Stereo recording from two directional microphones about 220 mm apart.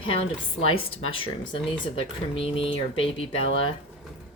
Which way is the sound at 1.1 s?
25° left (ahead or behind).